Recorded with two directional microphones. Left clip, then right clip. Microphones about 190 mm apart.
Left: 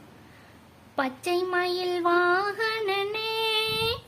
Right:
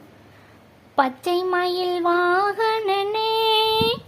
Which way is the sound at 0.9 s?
20° right (ahead or behind).